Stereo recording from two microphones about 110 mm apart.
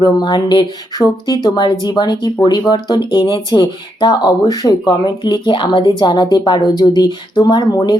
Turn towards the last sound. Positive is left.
turn(degrees=40)  # may be behind; listen again after turning